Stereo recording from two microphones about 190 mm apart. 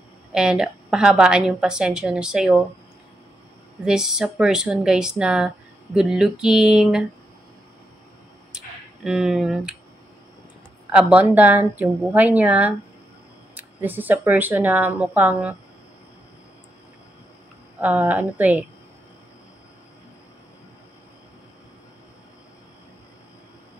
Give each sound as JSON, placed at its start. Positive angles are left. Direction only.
{"t": 0.3, "sound": "a woman's voice", "side_deg": -5}
{"t": 3.8, "sound": "a woman's voice", "side_deg": -5}
{"t": 8.5, "sound": "speech", "side_deg": -5}
{"t": 10.9, "sound": "speech", "side_deg": -5}
{"t": 17.7, "sound": "speech", "side_deg": -10}